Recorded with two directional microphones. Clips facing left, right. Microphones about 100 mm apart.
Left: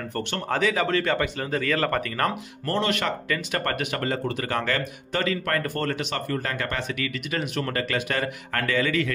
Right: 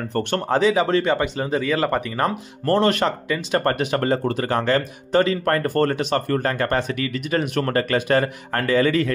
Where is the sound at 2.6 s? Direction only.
40° right (ahead or behind).